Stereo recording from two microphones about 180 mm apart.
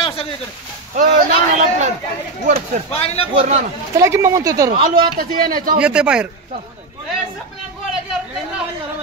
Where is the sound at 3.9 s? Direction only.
15° right (ahead or behind).